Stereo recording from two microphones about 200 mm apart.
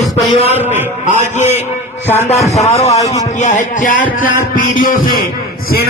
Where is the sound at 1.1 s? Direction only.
35° left (ahead or behind).